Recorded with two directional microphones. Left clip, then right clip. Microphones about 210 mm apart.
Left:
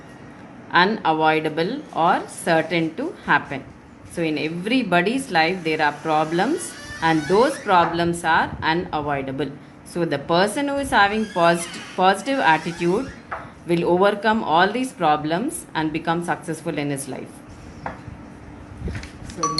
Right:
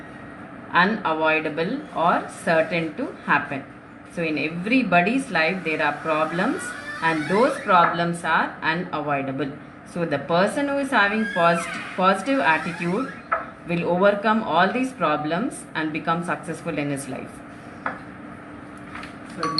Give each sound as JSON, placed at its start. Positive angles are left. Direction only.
{"t": 0.7, "sound": "speech", "side_deg": 25}